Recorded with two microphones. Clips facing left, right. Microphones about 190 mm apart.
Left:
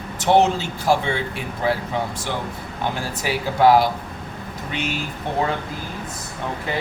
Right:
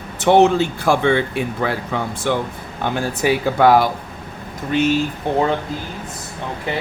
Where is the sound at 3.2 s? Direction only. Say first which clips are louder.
Right 3 dB; 55° right (ahead or behind).